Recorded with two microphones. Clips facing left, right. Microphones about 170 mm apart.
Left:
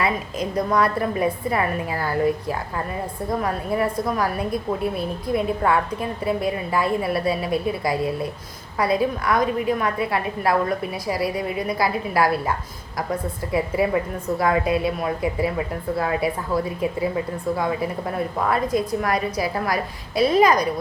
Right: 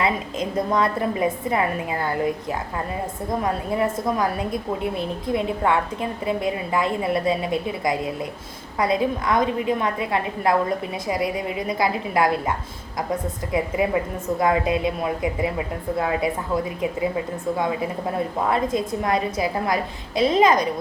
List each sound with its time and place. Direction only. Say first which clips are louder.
0.0 s a woman's voice: even; 25° right (ahead or behind)